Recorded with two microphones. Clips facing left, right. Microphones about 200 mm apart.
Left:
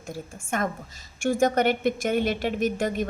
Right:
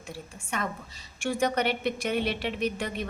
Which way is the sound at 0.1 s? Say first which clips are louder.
Left 5 dB; 45° left (ahead or behind).